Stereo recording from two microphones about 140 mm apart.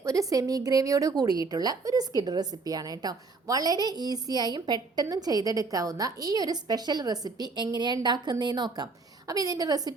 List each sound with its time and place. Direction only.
0.0 s a woman's voice: 25° right (ahead or behind)